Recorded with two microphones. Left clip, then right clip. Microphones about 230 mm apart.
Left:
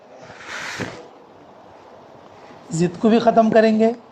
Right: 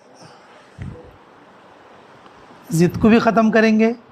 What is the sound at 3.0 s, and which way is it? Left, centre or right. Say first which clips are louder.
Speech: right 1 dB; right.